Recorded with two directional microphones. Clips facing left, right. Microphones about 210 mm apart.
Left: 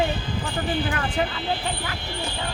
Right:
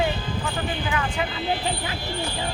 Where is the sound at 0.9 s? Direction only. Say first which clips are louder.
Left 1 dB; 45° left (ahead or behind).